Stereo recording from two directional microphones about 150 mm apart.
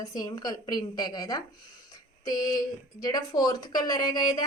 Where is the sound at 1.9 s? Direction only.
25° left (ahead or behind).